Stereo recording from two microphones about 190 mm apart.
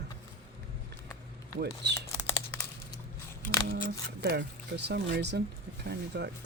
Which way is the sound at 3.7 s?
55° right (ahead or behind).